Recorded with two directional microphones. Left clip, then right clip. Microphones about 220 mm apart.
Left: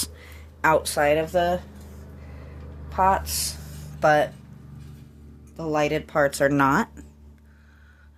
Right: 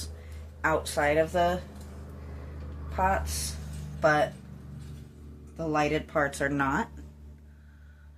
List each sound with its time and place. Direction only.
0.2 s speech: 50° left (ahead or behind)
2.9 s a woman's voice: 40° left (ahead or behind)
5.7 s speech: 45° left (ahead or behind)